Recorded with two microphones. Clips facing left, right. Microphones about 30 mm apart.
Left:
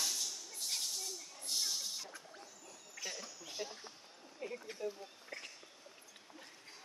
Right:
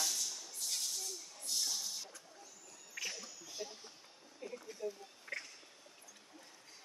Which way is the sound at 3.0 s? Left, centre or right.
Right.